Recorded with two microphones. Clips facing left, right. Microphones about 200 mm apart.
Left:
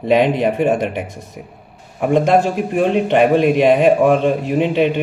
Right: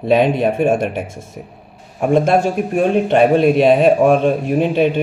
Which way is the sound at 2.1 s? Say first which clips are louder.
Even; 20° left (ahead or behind).